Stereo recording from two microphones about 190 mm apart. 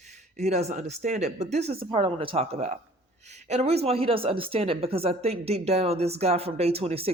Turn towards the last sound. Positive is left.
turn(degrees=-30)  # may be behind; listen again after turning